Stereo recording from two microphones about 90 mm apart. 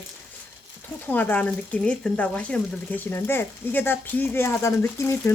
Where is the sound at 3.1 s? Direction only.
25° left (ahead or behind).